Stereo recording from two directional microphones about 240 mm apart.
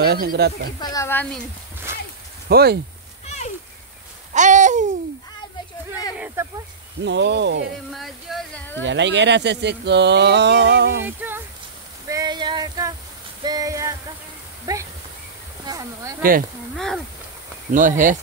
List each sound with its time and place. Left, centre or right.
0.0 s speech: right
0.7 s speech: centre
2.4 s speech: right
3.3 s a sound: left
4.3 s babbling: right
6.1 s a sound: centre
7.0 s speech: right
7.9 s speech: centre
8.8 s speech: right
11.1 s a sound: centre
16.2 s speech: right
16.7 s speech: centre
17.6 s speech: right